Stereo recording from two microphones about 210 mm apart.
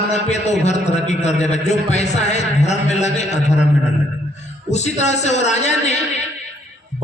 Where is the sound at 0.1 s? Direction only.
30° left (ahead or behind).